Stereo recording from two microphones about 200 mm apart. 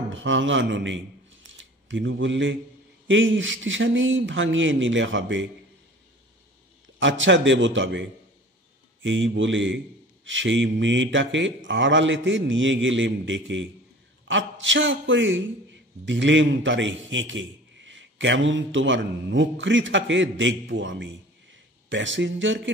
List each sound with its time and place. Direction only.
0.1 s speech: 70° right (ahead or behind)
1.5 s a sound: 70° right (ahead or behind)
3.1 s speech: 70° right (ahead or behind)
7.0 s a man's voice: 65° right (ahead or behind)